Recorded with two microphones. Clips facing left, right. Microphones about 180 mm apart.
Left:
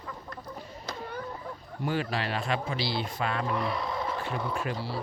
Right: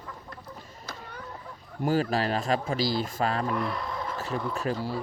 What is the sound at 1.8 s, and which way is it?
Speech, 40° right (ahead or behind).